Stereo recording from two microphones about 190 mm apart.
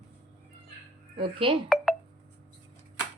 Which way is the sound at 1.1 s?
25° right (ahead or behind).